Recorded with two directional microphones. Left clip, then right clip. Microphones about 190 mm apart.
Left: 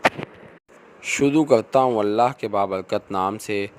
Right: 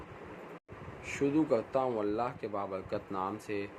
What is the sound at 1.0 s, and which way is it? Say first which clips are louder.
Speech: left 12 dB; 55° left (ahead or behind).